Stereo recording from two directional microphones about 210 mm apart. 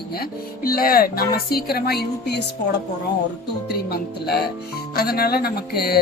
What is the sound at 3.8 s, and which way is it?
Speech, 50° left (ahead or behind).